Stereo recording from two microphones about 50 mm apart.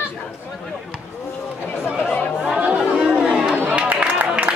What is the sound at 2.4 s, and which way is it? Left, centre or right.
Chatter, centre.